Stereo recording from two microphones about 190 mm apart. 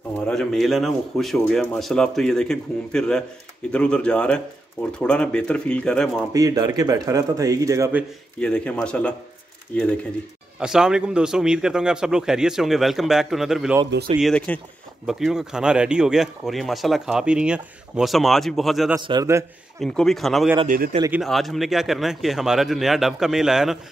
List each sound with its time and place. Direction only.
0.3 s speech: 5° left (ahead or behind)
6.3 s a man's voice: 20° right (ahead or behind)
8.4 s speech: 5° left (ahead or behind)
10.6 s speech: 5° right (ahead or behind)
18.9 s a man's voice: 20° right (ahead or behind)
19.8 s speech: centre (ahead or behind)
20.6 s speech: 50° right (ahead or behind)
21.1 s speech: centre (ahead or behind)